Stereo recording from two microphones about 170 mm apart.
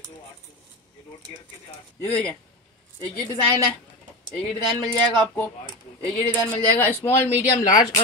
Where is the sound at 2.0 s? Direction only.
5° left (ahead or behind).